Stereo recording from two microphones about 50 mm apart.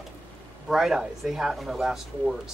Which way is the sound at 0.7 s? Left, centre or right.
Centre.